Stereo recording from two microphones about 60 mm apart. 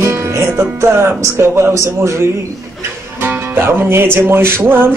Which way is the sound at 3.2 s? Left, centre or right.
Right.